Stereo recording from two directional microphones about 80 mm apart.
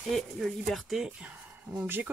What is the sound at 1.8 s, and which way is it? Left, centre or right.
Speech, right.